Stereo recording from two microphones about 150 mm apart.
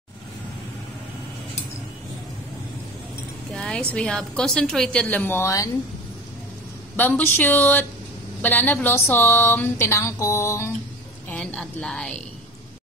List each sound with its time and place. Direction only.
3.5 s a woman's voice: 5° left (ahead or behind)
7.0 s a woman's voice: 10° left (ahead or behind)
11.2 s a woman's voice: 5° left (ahead or behind)